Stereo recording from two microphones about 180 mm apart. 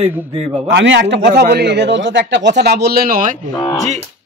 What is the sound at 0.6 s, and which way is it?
A man's voice, 85° right.